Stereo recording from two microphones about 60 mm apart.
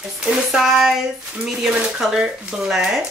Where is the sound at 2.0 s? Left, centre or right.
Centre.